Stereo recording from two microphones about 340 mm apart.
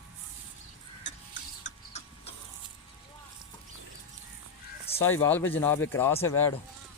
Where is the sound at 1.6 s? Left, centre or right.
Centre.